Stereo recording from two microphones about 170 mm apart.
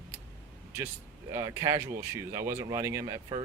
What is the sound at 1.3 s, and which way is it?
Speech, 15° right (ahead or behind).